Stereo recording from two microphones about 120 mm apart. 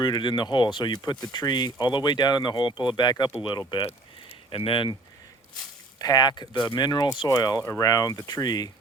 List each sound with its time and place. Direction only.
0.0 s speech: 40° left (ahead or behind)
3.8 s a sound: 55° left (ahead or behind)
6.0 s speech: 35° left (ahead or behind)